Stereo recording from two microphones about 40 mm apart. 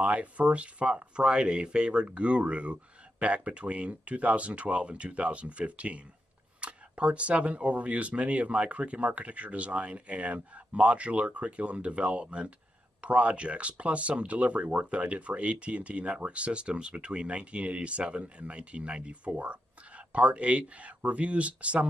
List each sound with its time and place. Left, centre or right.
0.0 s speech: right